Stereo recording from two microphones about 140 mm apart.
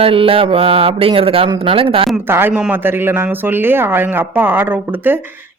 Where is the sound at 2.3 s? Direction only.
15° right (ahead or behind).